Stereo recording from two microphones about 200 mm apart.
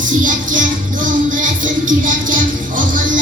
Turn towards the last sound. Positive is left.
turn(degrees=-40)  # may be behind; listen again after turning